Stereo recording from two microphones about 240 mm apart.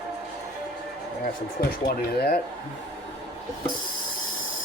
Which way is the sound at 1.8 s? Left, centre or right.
Left.